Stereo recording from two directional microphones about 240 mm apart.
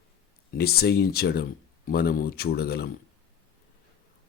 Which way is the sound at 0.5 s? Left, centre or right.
Left.